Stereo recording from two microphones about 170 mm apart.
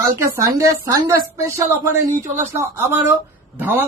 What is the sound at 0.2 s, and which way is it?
Speech, 15° right (ahead or behind).